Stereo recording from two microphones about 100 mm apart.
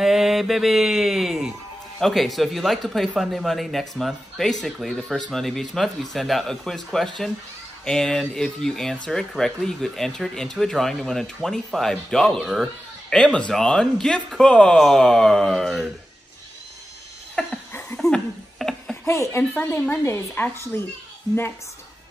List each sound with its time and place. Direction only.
0.0 s speech: 5° right (ahead or behind)
17.4 s speech: 10° left (ahead or behind)
18.1 s a sound: 5° left (ahead or behind)
19.0 s speech: 30° left (ahead or behind)
19.5 s speech: 20° left (ahead or behind)